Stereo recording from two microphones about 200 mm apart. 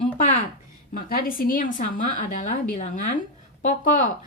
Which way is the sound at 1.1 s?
45° left (ahead or behind).